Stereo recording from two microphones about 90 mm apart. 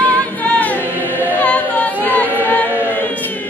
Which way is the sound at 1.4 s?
15° left (ahead or behind).